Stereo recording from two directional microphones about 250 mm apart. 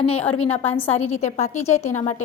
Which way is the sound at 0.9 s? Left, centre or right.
Left.